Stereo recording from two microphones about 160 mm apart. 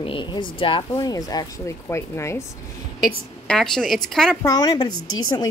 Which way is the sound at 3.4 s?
5° left (ahead or behind).